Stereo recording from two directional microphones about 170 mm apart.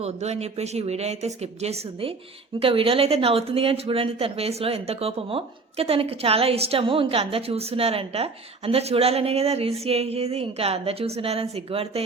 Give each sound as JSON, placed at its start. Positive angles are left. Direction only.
{"t": 0.0, "sound": "speech", "side_deg": -40}